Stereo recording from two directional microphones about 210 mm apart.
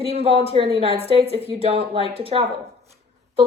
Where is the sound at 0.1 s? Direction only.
30° right (ahead or behind).